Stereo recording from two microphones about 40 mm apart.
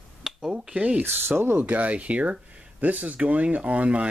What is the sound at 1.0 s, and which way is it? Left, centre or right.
Speech, right.